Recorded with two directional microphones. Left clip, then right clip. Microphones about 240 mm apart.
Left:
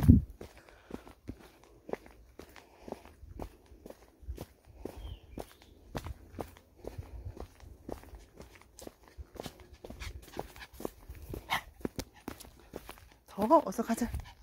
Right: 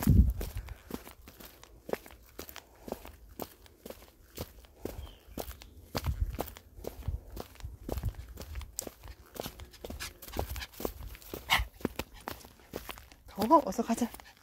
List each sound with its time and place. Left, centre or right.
0.0 s walk: right
7.3 s a sound: right
12.7 s walk: right
13.5 s speech: centre